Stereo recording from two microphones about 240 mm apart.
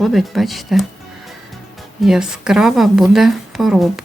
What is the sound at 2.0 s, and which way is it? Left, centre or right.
A woman's voice, centre.